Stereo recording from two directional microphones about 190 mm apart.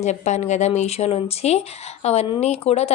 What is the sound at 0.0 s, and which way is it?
Speech, 35° left (ahead or behind).